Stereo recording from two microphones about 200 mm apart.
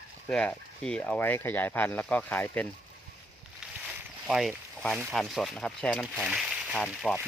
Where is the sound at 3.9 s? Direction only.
Centre (ahead or behind).